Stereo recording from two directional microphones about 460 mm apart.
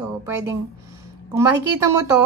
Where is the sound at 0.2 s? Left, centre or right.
Centre.